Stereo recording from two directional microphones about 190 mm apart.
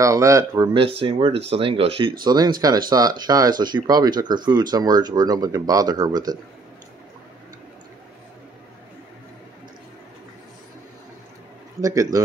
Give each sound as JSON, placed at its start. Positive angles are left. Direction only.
{"t": 0.0, "sound": "speech", "side_deg": -15}
{"t": 0.7, "sound": "speech", "side_deg": -30}
{"t": 11.8, "sound": "speech", "side_deg": -20}